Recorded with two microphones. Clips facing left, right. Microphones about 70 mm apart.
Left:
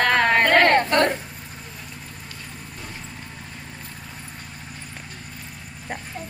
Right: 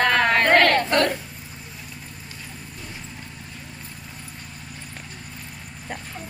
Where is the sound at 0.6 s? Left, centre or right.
Left.